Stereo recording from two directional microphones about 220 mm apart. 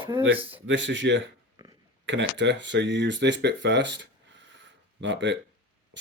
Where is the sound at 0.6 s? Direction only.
55° right (ahead or behind).